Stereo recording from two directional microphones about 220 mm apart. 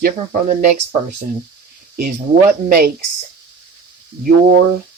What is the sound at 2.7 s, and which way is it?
Speech, 40° right (ahead or behind).